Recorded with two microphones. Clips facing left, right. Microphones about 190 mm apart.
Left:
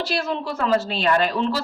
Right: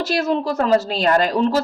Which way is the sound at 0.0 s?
40° right (ahead or behind).